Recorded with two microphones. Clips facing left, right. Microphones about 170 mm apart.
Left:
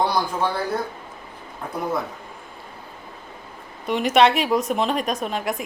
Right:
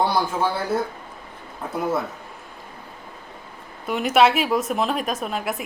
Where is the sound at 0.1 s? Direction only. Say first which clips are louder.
Right 1 dB; 5° right (ahead or behind).